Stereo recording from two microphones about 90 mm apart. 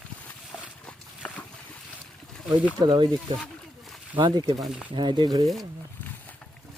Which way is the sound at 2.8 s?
55° right (ahead or behind).